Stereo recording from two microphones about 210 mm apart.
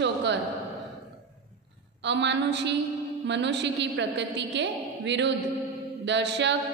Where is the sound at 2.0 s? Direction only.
55° right (ahead or behind).